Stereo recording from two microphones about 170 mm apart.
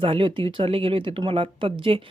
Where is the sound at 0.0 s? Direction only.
30° right (ahead or behind).